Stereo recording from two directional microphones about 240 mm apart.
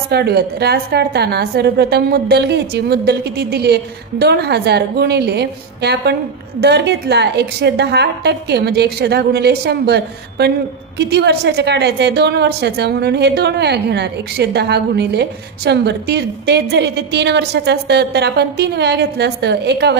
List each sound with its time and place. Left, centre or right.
0.1 s a woman's voice: right